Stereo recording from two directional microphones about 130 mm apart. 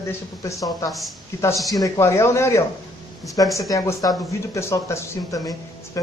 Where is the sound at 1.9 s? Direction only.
20° left (ahead or behind).